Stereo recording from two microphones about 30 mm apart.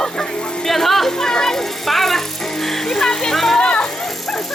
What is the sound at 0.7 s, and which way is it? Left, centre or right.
Music, centre.